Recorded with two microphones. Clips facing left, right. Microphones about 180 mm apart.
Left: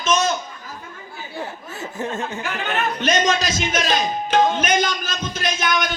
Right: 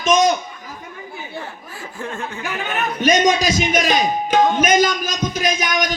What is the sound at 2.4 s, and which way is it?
A man's voice, 10° right (ahead or behind).